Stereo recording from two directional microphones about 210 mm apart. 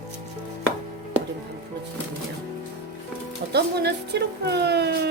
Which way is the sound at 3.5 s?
50° right (ahead or behind).